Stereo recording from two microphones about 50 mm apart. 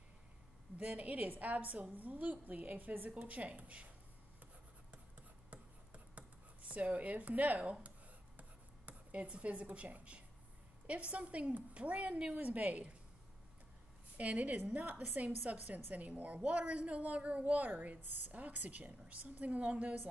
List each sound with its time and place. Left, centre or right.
0.7 s a woman's voice: right
6.1 s a sound: right
10.9 s a woman's voice: right
14.1 s a woman's voice: right